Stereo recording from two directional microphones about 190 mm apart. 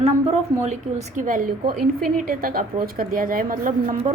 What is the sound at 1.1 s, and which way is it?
A woman's voice, 45° right (ahead or behind).